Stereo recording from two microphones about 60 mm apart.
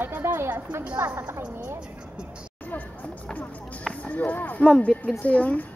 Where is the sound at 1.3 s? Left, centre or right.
Right.